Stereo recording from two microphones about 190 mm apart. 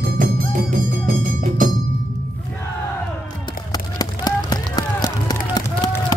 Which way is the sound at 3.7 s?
20° left (ahead or behind).